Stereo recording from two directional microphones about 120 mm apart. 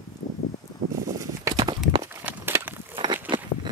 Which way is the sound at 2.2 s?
20° right (ahead or behind).